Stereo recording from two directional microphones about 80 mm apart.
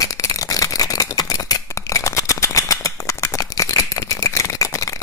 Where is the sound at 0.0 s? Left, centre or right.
Left.